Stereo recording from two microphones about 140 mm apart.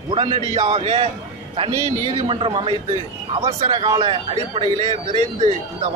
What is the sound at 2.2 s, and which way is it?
Speech, 40° right (ahead or behind).